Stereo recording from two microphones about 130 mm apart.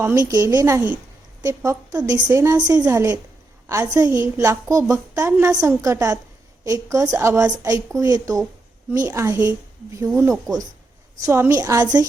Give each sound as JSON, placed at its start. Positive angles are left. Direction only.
{"t": 0.2, "sound": "a woman's voice", "side_deg": -25}
{"t": 2.3, "sound": "a woman's voice", "side_deg": -20}
{"t": 11.3, "sound": "a woman's voice", "side_deg": -20}